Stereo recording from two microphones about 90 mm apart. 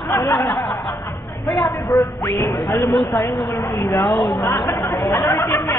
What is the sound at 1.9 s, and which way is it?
Speech, 30° left (ahead or behind).